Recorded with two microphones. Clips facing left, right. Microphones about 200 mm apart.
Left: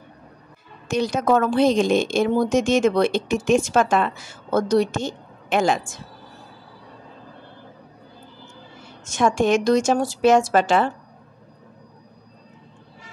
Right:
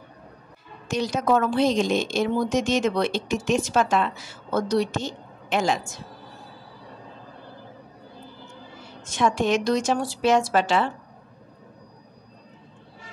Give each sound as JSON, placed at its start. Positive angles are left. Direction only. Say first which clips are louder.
{"t": 0.8, "sound": "a woman's voice", "louder": "left 3 dB", "side_deg": 50}
{"t": 9.0, "sound": "a woman's voice", "louder": "left 3 dB", "side_deg": 45}